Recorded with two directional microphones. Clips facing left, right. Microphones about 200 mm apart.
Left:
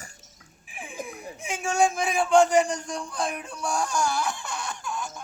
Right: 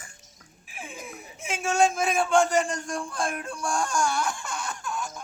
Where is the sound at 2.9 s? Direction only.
Centre (ahead or behind).